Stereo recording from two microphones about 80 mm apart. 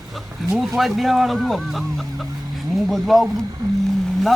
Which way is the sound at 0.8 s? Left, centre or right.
Centre.